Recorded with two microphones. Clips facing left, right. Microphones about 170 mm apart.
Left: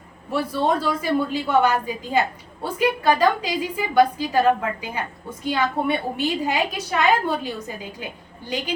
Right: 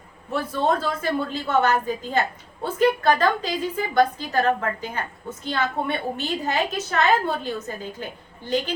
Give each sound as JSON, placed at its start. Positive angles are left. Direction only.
{"t": 0.5, "sound": "a woman's voice", "side_deg": 10}